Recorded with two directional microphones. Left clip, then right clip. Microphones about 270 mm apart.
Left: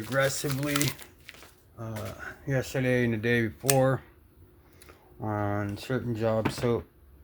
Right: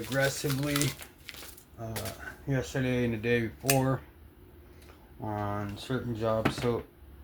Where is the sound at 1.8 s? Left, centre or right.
Left.